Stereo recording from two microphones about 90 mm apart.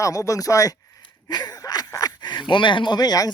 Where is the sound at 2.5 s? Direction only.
65° left (ahead or behind); by 3.3 s 45° left (ahead or behind).